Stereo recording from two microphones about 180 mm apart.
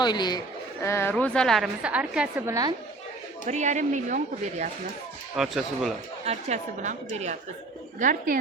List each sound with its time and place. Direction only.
0.0 s a woman's voice: 25° left (ahead or behind); by 2.6 s 5° right (ahead or behind)
3.5 s speech: 40° right (ahead or behind)
5.4 s a woman's voice: centre (ahead or behind)
6.2 s speech: 40° right (ahead or behind)